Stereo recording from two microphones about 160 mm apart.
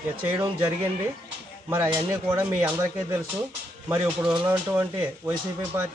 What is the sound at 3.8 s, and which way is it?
Speech, 15° right (ahead or behind).